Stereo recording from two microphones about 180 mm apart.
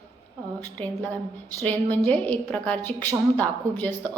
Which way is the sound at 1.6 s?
10° left (ahead or behind).